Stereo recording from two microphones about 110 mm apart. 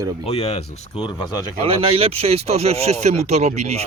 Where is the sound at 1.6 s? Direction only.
60° right (ahead or behind); by 3.7 s 85° right.